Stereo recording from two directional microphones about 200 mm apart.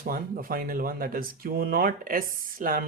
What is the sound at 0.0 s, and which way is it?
Speech, 45° right (ahead or behind).